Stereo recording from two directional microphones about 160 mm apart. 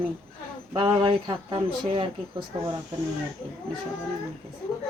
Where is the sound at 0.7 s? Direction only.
35° right (ahead or behind).